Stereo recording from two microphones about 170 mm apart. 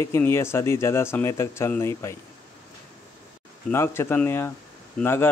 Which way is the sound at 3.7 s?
15° left (ahead or behind).